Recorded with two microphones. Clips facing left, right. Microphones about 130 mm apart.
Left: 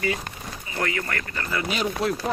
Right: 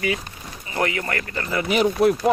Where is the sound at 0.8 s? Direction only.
25° right (ahead or behind).